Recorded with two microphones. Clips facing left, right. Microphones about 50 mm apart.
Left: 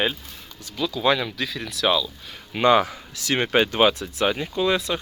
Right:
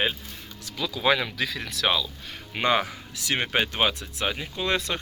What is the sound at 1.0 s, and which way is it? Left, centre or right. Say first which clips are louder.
Speech: left 1 dB; right.